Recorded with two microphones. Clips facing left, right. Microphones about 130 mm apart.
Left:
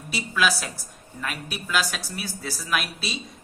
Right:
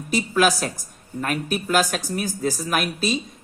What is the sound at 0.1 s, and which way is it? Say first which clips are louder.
A woman's voice: right 5 dB; 45° right (ahead or behind).